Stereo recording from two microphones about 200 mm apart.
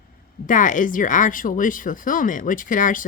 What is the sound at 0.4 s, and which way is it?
Speech, 40° left (ahead or behind).